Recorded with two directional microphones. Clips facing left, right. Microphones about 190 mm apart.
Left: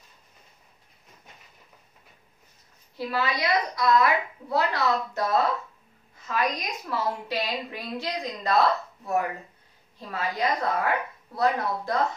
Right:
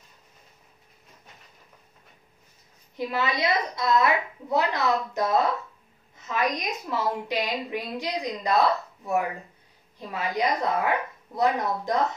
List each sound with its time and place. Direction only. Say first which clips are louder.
3.1 s a woman's voice: even; 25° right (ahead or behind)